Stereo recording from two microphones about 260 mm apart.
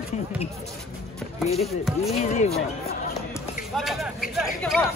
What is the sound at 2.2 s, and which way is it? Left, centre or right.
Speech, left.